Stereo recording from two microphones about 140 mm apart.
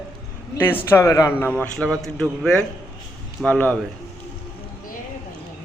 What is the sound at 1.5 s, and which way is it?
A man's voice, 5° left (ahead or behind).